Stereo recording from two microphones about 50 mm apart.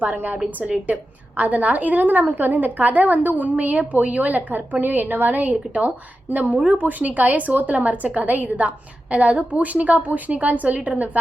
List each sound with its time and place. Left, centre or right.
0.0 s a woman's voice: right
1.4 s a woman's voice: right